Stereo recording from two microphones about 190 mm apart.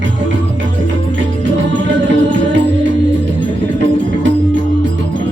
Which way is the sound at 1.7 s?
75° right (ahead or behind).